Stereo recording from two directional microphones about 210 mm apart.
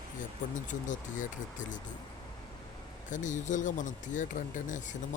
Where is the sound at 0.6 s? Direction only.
35° left (ahead or behind).